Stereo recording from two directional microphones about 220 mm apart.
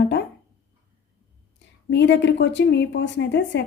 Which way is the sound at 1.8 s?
55° left (ahead or behind).